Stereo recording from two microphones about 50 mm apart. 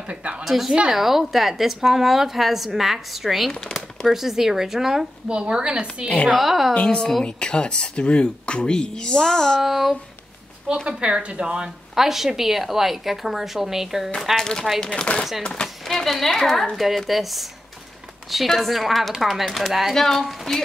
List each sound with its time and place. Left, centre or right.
0.1 s a woman's voice: right
0.5 s a woman's voice: centre
5.3 s a woman's voice: centre
6.3 s a woman's voice: centre
6.7 s speech: left
9.6 s a woman's voice: centre
10.9 s a woman's voice: centre
11.9 s a woman's voice: centre
14.3 s speech: centre
15.9 s a woman's voice: centre